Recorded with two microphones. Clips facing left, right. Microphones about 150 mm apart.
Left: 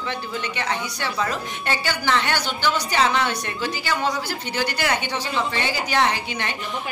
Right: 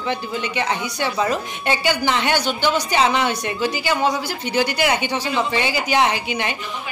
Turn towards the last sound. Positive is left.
turn(degrees=-15)  # may be behind; listen again after turning